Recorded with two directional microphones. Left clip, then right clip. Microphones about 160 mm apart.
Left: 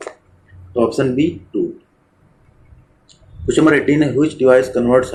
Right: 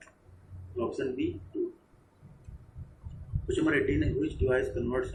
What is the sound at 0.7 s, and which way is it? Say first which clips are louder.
Speech: left 17 dB; 60° left (ahead or behind).